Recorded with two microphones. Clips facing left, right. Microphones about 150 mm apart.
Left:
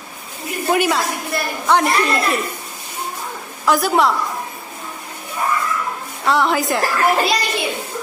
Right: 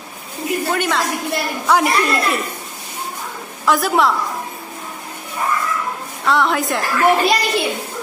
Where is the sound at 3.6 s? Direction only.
Centre (ahead or behind).